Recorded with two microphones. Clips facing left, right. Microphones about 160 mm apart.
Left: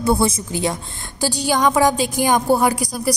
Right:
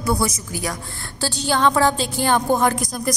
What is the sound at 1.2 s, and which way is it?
Speech, 15° left (ahead or behind).